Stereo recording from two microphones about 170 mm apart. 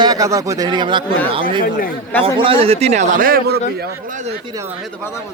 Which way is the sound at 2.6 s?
40° right (ahead or behind).